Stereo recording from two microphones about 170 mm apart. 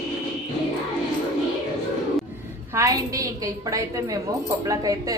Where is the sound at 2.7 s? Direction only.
20° right (ahead or behind).